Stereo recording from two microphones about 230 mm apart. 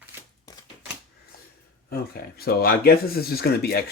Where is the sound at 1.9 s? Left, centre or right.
Left.